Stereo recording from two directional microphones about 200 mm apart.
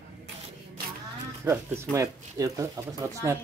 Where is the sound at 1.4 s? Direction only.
10° right (ahead or behind).